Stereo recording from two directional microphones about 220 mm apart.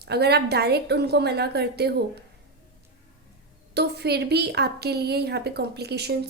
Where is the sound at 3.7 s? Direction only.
50° right (ahead or behind).